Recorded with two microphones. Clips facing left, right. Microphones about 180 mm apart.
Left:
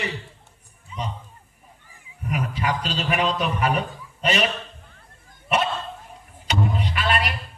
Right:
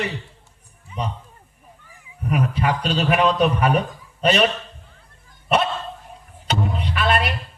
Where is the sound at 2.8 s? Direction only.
65° right (ahead or behind).